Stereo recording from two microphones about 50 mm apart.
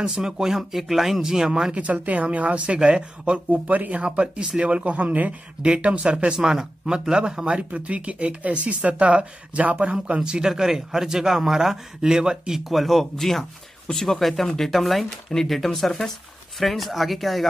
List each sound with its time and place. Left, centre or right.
0.1 s speech: centre
12.6 s speech: centre